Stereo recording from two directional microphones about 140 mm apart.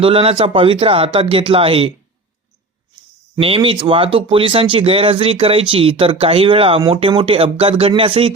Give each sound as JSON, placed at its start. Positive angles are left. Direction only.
{"t": 0.0, "sound": "speech", "side_deg": -40}
{"t": 3.4, "sound": "speech", "side_deg": -40}